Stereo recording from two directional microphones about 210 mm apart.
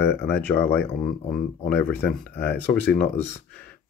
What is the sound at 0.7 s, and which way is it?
Speech, 45° left (ahead or behind).